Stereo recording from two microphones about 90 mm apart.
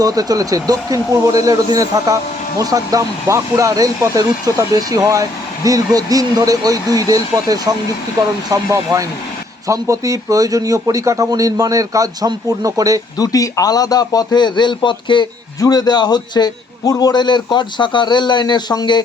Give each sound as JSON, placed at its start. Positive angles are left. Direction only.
{"t": 0.0, "sound": "a man's voice", "side_deg": -45}
{"t": 13.1, "sound": "a man's voice", "side_deg": 40}
{"t": 15.6, "sound": "a man's voice", "side_deg": 45}